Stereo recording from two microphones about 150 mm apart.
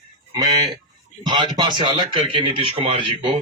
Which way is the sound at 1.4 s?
30° right (ahead or behind).